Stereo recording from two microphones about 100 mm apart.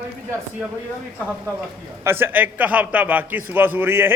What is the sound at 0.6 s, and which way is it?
Speech, 5° right (ahead or behind).